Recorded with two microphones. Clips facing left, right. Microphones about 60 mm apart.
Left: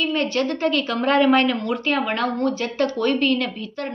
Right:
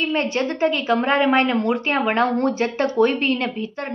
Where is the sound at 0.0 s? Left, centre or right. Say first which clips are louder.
Even; right.